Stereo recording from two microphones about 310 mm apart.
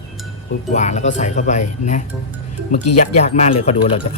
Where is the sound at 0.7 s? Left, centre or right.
Left.